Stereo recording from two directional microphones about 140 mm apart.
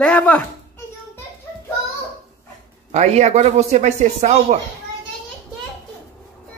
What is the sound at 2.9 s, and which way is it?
Speech, 50° right (ahead or behind).